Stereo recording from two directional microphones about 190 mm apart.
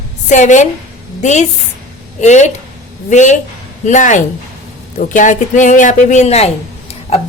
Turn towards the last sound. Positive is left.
turn(degrees=30)  # may be behind; listen again after turning